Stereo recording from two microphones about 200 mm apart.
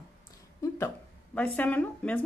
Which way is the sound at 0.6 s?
15° left (ahead or behind).